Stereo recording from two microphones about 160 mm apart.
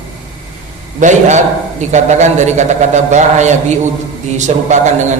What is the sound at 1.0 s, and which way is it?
A man's voice, 50° right (ahead or behind).